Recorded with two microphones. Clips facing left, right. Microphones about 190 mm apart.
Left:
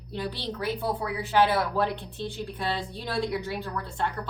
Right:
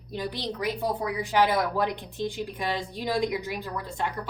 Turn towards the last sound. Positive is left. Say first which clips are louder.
# even
turn(degrees=-10)  # may be behind; listen again after turning